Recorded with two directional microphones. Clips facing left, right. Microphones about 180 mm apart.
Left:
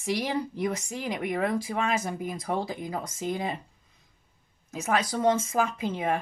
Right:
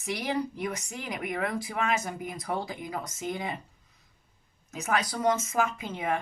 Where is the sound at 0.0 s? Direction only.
30° left (ahead or behind).